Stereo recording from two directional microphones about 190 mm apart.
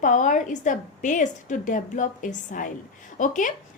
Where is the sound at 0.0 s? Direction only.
40° left (ahead or behind).